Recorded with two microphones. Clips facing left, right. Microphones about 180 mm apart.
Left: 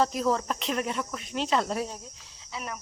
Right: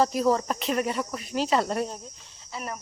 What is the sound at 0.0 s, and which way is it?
A woman's voice, centre (ahead or behind).